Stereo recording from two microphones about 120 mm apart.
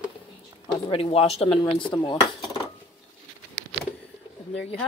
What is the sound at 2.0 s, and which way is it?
Cutlery, 40° left (ahead or behind).